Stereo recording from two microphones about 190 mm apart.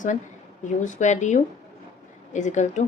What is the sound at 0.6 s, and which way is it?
A woman's voice, 40° left (ahead or behind).